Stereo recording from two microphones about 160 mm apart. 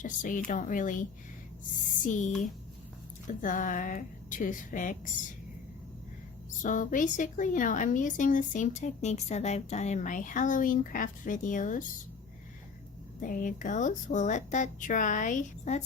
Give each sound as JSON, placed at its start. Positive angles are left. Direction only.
{"t": 0.0, "sound": "a woman's voice", "side_deg": 55}
{"t": 2.0, "sound": "a woman's voice", "side_deg": 50}
{"t": 6.6, "sound": "a woman's voice", "side_deg": 55}
{"t": 13.1, "sound": "a woman's voice", "side_deg": 55}